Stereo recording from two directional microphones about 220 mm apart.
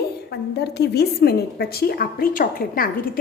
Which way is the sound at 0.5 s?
50° left (ahead or behind).